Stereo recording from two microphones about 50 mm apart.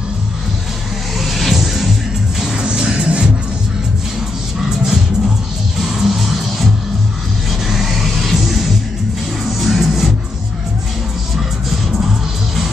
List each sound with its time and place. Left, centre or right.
1.2 s music: centre
2.5 s music: centre
4.6 s music: centre
7.6 s music: centre
11.3 s music: centre